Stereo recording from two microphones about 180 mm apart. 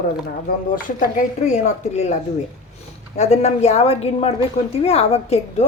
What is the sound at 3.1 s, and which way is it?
A woman's voice, 35° left (ahead or behind).